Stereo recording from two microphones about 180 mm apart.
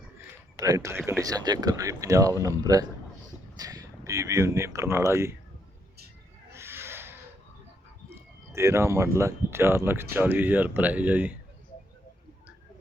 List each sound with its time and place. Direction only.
0.2 s speech: 20° right (ahead or behind)
6.5 s a sound: 15° right (ahead or behind)
8.5 s speech: 15° right (ahead or behind)